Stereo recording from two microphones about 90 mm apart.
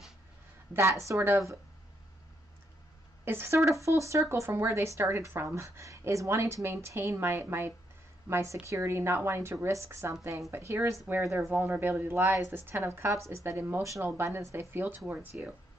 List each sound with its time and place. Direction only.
1.0 s a woman's voice: 30° right (ahead or behind)
3.3 s a woman's voice: 30° right (ahead or behind)